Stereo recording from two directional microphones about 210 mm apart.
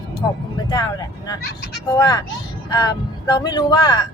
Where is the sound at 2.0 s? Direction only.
20° left (ahead or behind).